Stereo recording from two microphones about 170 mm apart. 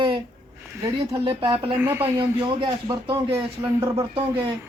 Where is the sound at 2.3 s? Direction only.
30° right (ahead or behind).